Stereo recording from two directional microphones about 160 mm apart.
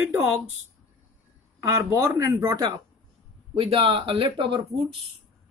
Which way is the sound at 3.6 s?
35° right (ahead or behind).